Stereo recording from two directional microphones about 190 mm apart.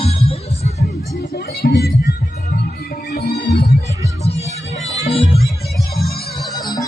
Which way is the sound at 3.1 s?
60° left (ahead or behind).